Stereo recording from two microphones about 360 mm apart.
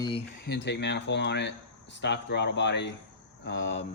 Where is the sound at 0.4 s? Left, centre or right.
Left.